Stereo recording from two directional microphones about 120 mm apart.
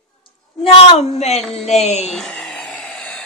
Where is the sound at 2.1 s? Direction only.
5° left (ahead or behind).